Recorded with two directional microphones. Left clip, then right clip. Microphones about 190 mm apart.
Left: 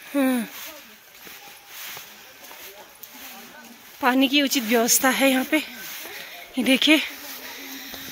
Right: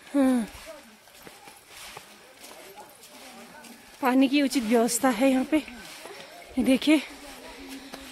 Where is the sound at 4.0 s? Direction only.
Centre (ahead or behind).